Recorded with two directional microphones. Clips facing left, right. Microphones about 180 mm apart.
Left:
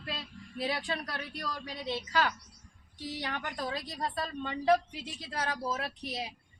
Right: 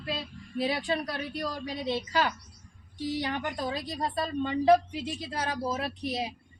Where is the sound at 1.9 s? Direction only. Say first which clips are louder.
Right 2 dB; 25° right (ahead or behind).